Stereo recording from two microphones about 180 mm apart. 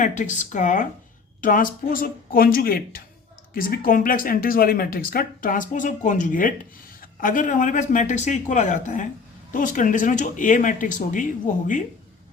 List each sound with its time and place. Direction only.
0.0 s speech: 45° left (ahead or behind)